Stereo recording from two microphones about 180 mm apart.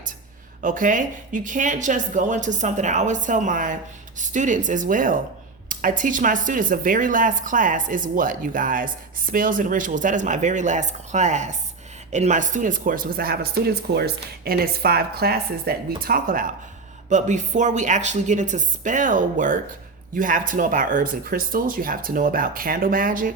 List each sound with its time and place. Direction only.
0.6 s a woman's voice: 45° right (ahead or behind)